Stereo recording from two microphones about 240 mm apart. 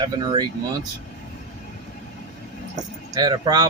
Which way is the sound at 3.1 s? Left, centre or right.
Centre.